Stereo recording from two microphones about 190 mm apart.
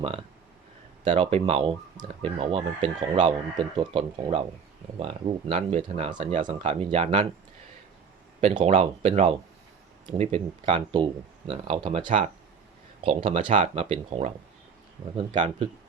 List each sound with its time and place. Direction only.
1.0 s speech: 30° right (ahead or behind)
8.5 s speech: 30° right (ahead or behind)